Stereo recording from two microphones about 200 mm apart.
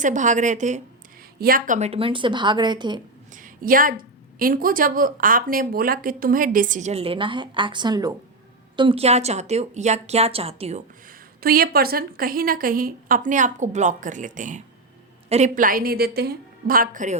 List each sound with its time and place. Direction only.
0.0 s a woman's voice: 40° right (ahead or behind); by 3.0 s 20° right (ahead or behind)
3.3 s a woman's voice: 45° right (ahead or behind)
11.3 s a woman's voice: 50° right (ahead or behind)